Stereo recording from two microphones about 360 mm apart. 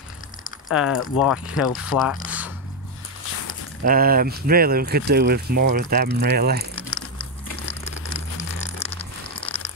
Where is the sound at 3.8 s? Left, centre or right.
Right.